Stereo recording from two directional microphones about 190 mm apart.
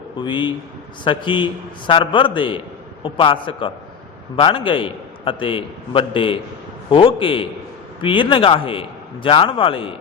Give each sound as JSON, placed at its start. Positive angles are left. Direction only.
{"t": 0.2, "sound": "a man's voice", "side_deg": 25}